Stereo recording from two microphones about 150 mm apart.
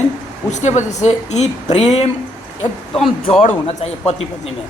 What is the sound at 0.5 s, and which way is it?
Speech, 50° left (ahead or behind).